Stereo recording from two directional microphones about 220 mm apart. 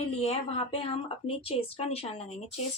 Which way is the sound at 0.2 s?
25° left (ahead or behind).